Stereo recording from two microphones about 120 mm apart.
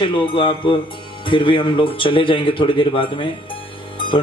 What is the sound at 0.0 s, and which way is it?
A man's voice, 45° left (ahead or behind).